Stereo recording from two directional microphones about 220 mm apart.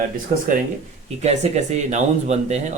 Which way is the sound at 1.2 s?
30° right (ahead or behind).